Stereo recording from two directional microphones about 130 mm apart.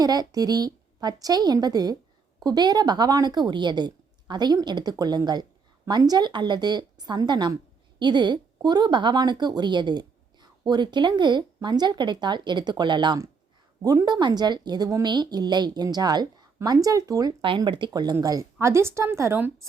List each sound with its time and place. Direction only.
0.0 s speech: 30° right (ahead or behind)
17.7 s a woman's voice: 40° right (ahead or behind); by 19.5 s 20° right (ahead or behind)